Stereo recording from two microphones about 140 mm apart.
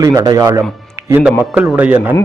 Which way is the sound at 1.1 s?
10° right (ahead or behind).